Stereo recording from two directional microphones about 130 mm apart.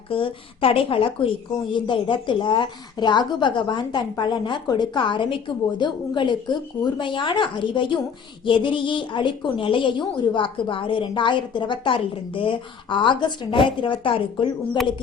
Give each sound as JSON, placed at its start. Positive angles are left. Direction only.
{"t": 0.1, "sound": "a woman's voice", "side_deg": 45}